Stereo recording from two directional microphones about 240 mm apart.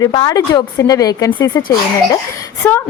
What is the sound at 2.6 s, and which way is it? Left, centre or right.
Speech, centre.